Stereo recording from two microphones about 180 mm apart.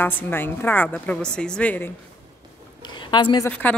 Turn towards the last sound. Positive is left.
turn(degrees=10)  # may be behind; listen again after turning